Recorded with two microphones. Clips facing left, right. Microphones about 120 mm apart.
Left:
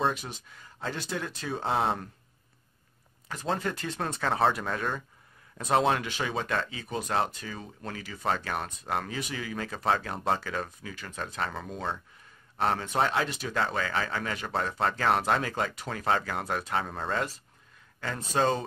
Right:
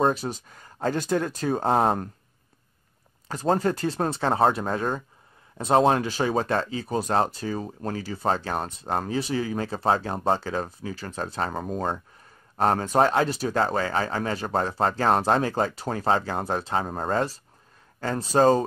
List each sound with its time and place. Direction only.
0.0 s speech: 40° right (ahead or behind)
3.3 s speech: 40° right (ahead or behind)